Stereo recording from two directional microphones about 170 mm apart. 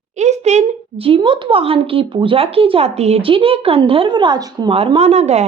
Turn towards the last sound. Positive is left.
turn(degrees=-40)  # may be behind; listen again after turning